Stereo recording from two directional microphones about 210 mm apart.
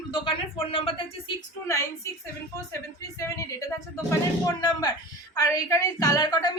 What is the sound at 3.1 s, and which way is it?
A woman's voice, 15° left (ahead or behind).